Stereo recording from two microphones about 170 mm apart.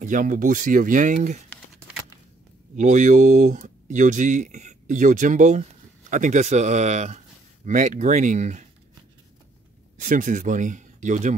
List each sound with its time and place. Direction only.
0.0 s speech: 50° right (ahead or behind)
2.7 s speech: 45° right (ahead or behind)
9.9 s speech: 50° right (ahead or behind)